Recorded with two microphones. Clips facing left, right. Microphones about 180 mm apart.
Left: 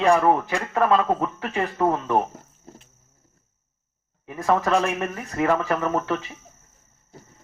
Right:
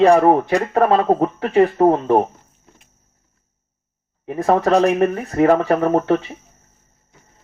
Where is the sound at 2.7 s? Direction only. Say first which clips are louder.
Left 8 dB; 35° left (ahead or behind).